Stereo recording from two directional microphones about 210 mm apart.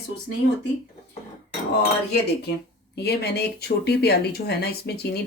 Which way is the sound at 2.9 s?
50° left (ahead or behind).